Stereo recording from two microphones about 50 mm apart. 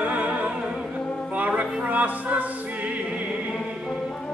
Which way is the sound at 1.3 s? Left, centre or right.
Right.